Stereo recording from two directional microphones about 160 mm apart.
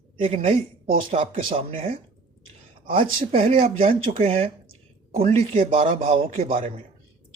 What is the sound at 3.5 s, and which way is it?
Speech, 60° right (ahead or behind).